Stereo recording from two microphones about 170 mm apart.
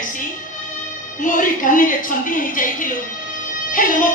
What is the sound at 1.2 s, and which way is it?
A woman's voice, 50° left (ahead or behind).